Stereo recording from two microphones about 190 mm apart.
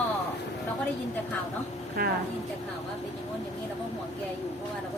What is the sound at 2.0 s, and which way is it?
Speech, 50° right (ahead or behind).